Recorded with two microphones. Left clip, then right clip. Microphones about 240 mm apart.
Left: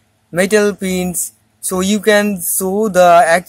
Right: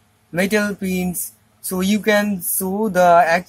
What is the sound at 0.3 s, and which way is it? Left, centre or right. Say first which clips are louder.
Speech: left 7 dB; left.